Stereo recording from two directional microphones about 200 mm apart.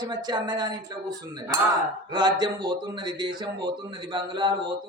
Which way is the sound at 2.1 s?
20° right (ahead or behind).